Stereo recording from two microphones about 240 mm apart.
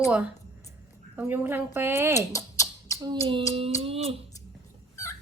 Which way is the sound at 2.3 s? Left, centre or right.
Centre.